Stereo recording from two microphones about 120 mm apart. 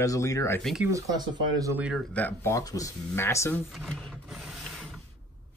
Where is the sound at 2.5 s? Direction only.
30° left (ahead or behind).